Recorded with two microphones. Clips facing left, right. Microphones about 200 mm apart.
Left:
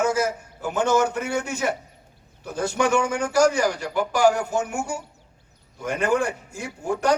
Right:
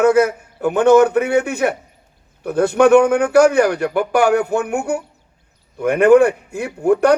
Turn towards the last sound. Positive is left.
turn(degrees=-60)  # may be behind; listen again after turning